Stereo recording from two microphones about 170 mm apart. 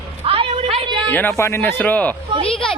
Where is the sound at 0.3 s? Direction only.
35° right (ahead or behind).